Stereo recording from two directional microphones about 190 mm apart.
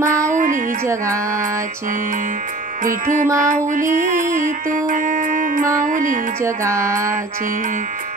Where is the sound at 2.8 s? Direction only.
45° right (ahead or behind).